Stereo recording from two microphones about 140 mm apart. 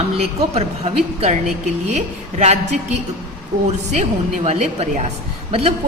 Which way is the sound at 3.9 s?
55° right (ahead or behind).